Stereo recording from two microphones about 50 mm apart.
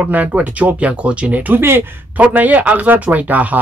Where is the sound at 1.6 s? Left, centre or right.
Right.